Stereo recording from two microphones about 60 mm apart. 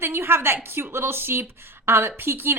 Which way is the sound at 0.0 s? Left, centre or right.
Right.